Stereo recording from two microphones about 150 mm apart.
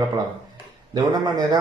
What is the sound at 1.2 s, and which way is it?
Speech, 30° right (ahead or behind).